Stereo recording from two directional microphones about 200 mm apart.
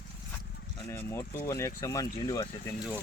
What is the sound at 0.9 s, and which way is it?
Speech, 15° left (ahead or behind).